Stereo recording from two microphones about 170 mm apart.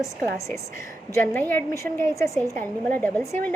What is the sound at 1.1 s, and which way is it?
A woman's voice, 15° left (ahead or behind).